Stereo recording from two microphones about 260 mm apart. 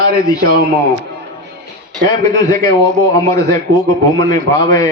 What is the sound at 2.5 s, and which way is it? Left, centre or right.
A man's voice, centre.